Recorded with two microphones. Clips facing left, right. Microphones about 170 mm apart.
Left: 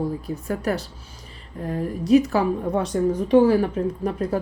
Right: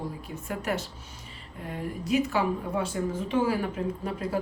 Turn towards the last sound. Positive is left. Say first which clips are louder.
# left 6 dB
turn(degrees=40)  # may be behind; listen again after turning